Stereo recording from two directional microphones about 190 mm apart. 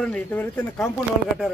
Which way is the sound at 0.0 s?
10° left (ahead or behind).